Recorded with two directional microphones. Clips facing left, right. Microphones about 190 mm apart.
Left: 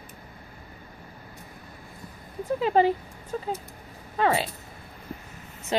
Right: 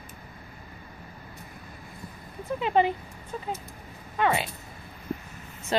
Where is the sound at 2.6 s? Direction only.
35° left (ahead or behind).